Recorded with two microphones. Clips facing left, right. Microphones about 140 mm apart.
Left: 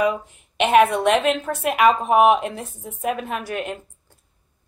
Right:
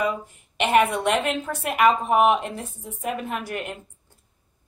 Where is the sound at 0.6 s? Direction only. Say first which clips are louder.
Left 4 dB; 65° left (ahead or behind).